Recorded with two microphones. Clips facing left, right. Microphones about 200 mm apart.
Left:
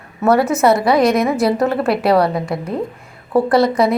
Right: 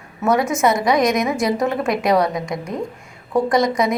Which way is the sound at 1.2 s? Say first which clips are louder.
Left 4 dB; 60° left (ahead or behind).